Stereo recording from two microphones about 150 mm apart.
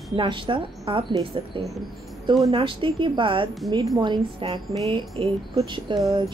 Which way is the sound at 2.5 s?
35° right (ahead or behind).